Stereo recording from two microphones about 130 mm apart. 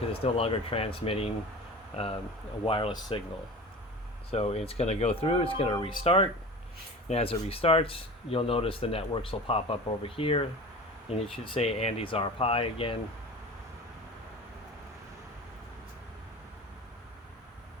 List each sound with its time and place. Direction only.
0.1 s speech: 50° left (ahead or behind)
2.6 s speech: 40° left (ahead or behind)
4.3 s speech: 55° left (ahead or behind)